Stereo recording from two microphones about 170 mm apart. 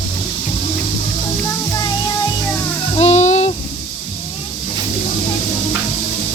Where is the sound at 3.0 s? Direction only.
40° left (ahead or behind).